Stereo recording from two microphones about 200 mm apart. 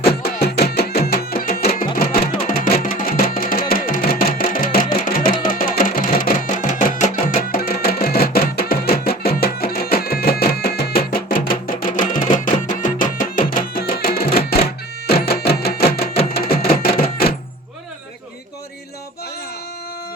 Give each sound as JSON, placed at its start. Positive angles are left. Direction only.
{"t": 0.3, "sound": "music", "side_deg": 55}